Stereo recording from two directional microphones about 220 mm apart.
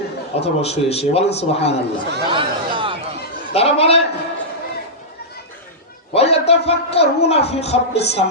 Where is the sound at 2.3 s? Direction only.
25° right (ahead or behind).